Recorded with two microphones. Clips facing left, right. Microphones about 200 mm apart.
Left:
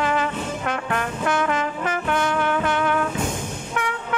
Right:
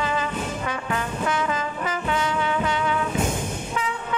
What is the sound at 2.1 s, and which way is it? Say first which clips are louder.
Music: left 2 dB; 60° left (ahead or behind).